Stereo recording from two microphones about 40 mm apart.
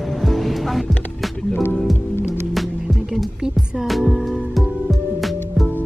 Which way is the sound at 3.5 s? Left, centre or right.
Centre.